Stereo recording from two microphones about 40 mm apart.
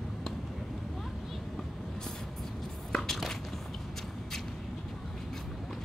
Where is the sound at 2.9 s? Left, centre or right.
Centre.